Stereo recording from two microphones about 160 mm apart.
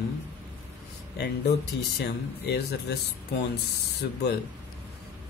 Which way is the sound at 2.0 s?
90° left.